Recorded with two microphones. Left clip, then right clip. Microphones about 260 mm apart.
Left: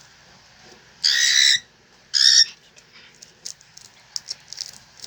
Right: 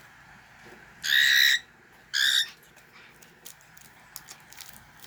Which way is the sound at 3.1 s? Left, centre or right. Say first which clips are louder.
Left 11 dB; right.